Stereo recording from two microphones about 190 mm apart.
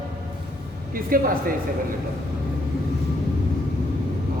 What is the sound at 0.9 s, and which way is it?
Speech, 50° right (ahead or behind).